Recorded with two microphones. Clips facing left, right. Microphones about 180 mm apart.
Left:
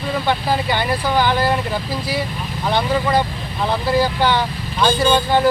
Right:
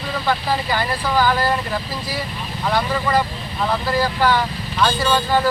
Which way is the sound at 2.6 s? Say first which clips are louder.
Left 2 dB; 25° left (ahead or behind).